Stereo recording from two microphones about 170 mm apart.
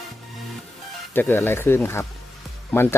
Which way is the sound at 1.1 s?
10° left (ahead or behind).